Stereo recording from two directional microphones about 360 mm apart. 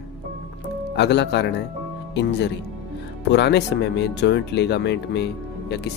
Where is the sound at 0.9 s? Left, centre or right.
Left.